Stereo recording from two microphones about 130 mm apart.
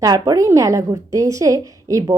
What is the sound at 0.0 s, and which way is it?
A woman's voice, 30° right (ahead or behind).